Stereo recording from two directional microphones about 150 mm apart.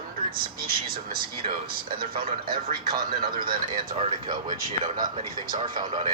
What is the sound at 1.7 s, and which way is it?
Speech, 75° right (ahead or behind).